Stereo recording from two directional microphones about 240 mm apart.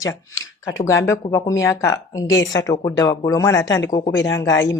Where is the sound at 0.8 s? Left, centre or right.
Centre.